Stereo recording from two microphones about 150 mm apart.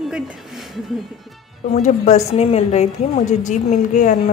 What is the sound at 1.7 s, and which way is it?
A woman's voice, 55° left (ahead or behind).